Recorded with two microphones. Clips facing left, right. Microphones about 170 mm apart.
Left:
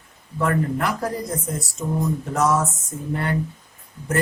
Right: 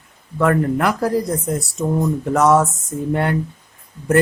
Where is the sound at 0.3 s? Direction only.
65° right (ahead or behind).